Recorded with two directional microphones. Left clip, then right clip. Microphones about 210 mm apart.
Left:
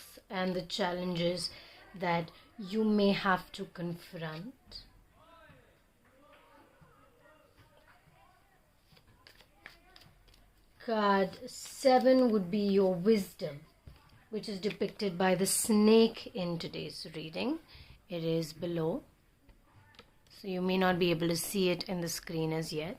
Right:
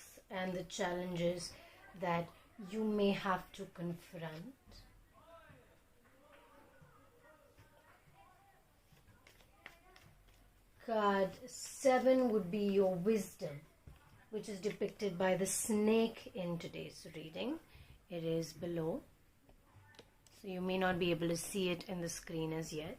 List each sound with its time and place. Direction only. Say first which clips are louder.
0.3 s speech: left 7 dB; 40° left (ahead or behind)
10.8 s speech: left 5 dB; 40° left (ahead or behind)
14.6 s speech: left 4 dB; 40° left (ahead or behind); by 18.9 s 25° left (ahead or behind)
20.4 s speech: left 6 dB; 25° left (ahead or behind)